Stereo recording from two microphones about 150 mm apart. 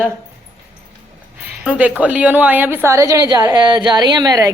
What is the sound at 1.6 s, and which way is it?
A woman's voice, 10° right (ahead or behind).